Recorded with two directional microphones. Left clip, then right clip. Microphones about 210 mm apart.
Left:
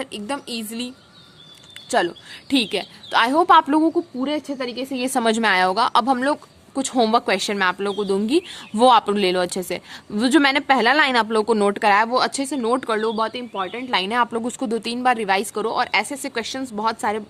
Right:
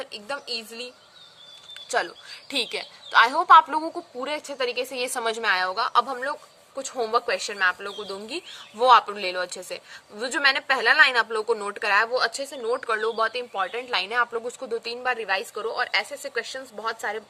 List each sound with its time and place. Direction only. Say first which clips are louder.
0.0 s a woman's voice: left 5 dB; 35° left (ahead or behind)
1.9 s a woman's voice: left 6 dB; 25° left (ahead or behind)
4.2 s a woman's voice: left 3 dB; 10° left (ahead or behind)
13.9 s a woman's voice: left 5 dB; 30° left (ahead or behind)